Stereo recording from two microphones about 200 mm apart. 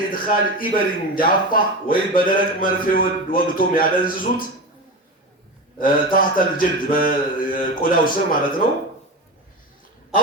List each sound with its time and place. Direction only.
0.1 s a man's voice: 45° left (ahead or behind)
5.8 s a man's voice: 45° left (ahead or behind)